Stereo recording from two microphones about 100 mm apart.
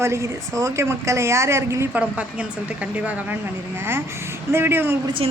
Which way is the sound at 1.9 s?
15° right (ahead or behind).